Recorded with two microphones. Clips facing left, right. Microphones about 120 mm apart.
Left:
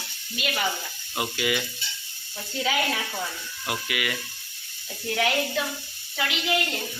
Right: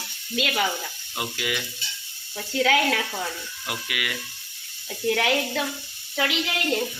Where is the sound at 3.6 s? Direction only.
Centre (ahead or behind).